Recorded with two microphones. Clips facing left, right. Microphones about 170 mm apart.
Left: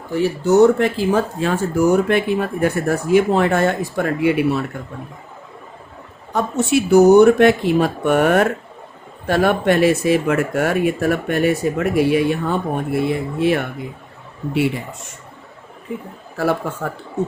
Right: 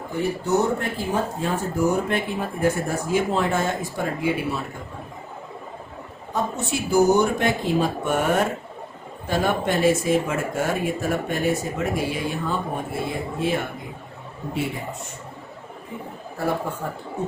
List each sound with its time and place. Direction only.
0.1 s speech: 90° left; by 4.6 s 65° left (ahead or behind)
6.3 s speech: 75° left (ahead or behind)
16.4 s a man's voice: 90° left